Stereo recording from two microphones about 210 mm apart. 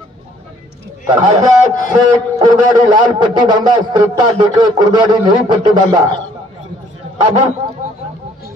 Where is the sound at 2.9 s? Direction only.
20° right (ahead or behind).